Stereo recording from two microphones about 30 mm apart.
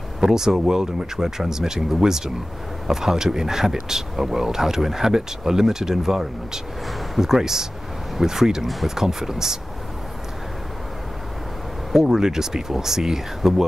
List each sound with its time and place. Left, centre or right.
0.2 s speech: centre
11.9 s speech: centre